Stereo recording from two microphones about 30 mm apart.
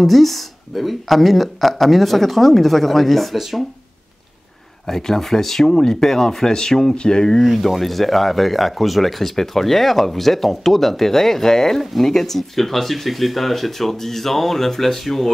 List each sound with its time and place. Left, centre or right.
0.0 s speech: centre
4.8 s speech: centre
7.0 s speech: left
7.4 s speech: centre
11.8 s speech: centre